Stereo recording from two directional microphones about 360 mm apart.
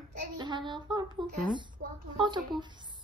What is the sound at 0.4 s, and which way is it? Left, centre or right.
Child singing, centre.